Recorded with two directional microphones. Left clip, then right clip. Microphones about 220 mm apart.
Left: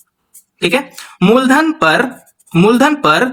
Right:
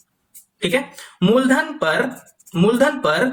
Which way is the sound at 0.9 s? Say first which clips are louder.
Left 6 dB; 45° left (ahead or behind).